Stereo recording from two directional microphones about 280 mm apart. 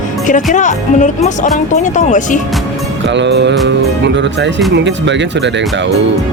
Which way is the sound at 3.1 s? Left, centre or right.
Right.